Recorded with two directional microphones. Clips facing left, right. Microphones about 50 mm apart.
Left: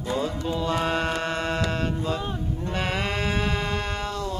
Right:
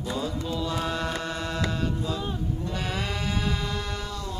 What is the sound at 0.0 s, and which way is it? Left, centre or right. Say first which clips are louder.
Music: left 3 dB; left.